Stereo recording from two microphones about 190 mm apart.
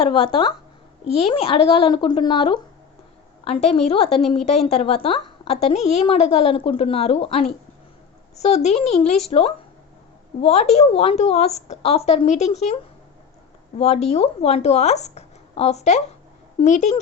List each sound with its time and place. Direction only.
0.0 s a woman's voice: 30° left (ahead or behind)
10.4 s a woman's voice: 35° left (ahead or behind)